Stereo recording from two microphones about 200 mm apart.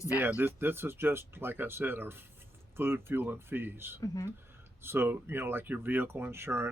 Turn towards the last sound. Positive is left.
turn(degrees=-10)  # may be behind; listen again after turning